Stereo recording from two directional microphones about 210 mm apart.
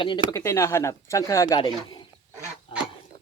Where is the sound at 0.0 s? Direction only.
20° left (ahead or behind).